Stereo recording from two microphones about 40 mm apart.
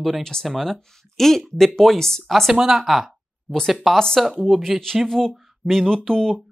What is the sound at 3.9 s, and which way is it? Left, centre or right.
Speech, centre.